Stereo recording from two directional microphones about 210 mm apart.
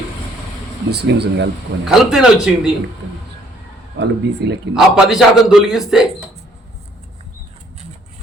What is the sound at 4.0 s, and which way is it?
Speech, 55° right (ahead or behind).